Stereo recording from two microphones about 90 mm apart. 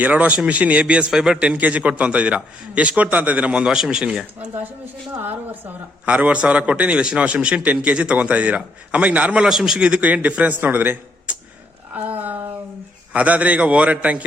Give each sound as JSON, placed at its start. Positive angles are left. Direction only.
{"t": 0.0, "sound": "speech", "side_deg": -15}
{"t": 5.2, "sound": "speech", "side_deg": -20}